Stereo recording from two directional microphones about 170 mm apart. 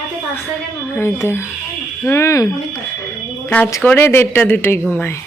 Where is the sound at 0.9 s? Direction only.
15° left (ahead or behind).